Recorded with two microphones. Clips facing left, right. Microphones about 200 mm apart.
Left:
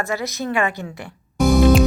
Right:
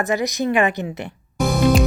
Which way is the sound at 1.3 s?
Centre (ahead or behind).